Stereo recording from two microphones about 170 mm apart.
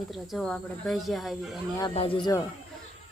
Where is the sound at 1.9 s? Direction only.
30° left (ahead or behind).